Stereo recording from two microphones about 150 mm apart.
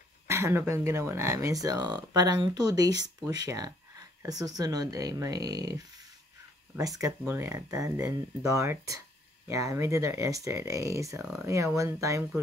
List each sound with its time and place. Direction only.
0.3 s speech: 15° right (ahead or behind)